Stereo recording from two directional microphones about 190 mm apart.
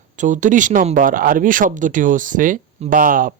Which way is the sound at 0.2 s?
40° right (ahead or behind).